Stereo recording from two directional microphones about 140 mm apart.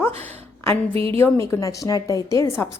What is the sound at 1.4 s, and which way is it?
A woman's voice, 20° left (ahead or behind).